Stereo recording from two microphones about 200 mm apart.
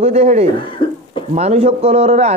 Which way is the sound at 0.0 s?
30° right (ahead or behind).